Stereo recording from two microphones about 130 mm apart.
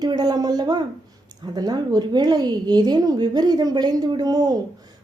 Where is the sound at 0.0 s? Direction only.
30° right (ahead or behind).